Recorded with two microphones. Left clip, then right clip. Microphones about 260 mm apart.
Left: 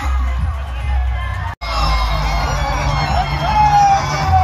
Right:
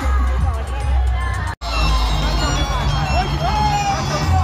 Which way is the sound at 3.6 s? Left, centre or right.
Right.